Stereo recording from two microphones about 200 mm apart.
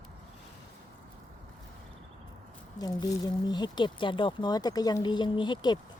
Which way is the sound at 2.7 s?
20° left (ahead or behind).